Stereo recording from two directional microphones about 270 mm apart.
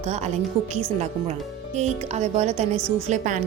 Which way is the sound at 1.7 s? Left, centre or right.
Right.